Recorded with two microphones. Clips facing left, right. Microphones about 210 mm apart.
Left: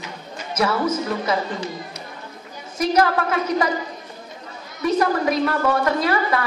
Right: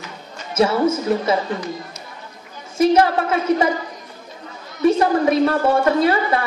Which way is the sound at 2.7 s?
25° right (ahead or behind).